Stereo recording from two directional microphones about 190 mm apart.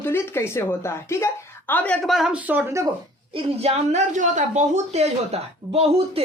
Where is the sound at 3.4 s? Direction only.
35° right (ahead or behind).